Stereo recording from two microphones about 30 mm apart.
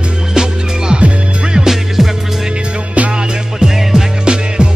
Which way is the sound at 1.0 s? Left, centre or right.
Right.